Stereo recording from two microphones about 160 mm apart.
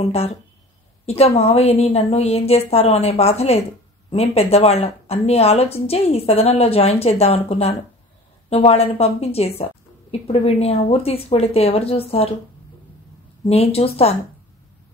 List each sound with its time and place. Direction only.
0.0 s a woman's voice: 40° left (ahead or behind)
13.5 s a woman's voice: 40° left (ahead or behind)